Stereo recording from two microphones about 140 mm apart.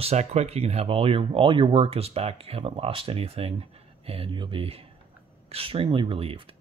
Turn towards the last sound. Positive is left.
turn(degrees=-40)  # may be behind; listen again after turning